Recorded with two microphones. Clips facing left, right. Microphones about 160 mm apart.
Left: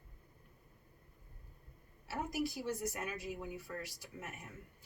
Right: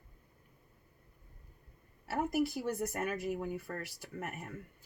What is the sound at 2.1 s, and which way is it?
Speech, 55° right (ahead or behind).